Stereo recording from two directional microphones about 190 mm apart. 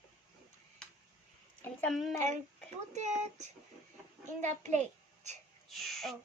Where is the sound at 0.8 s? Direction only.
5° left (ahead or behind).